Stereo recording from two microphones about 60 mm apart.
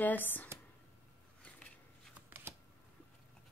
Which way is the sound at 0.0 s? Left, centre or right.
Left.